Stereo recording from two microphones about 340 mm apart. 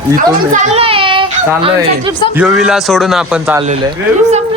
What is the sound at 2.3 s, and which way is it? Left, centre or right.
A man's voice, centre.